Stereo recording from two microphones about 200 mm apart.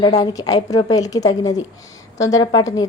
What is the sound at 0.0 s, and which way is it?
A woman's voice, 20° left (ahead or behind).